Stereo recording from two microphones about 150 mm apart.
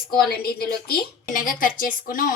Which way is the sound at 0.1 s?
90° left.